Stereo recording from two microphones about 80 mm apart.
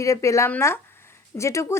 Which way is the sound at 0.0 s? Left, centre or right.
Left.